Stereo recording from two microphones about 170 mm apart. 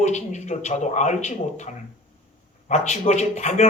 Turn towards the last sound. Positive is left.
turn(degrees=45)  # may be behind; listen again after turning